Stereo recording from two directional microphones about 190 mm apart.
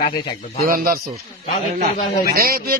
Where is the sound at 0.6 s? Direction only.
50° right (ahead or behind).